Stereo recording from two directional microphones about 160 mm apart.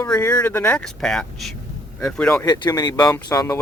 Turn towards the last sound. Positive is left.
turn(degrees=20)  # may be behind; listen again after turning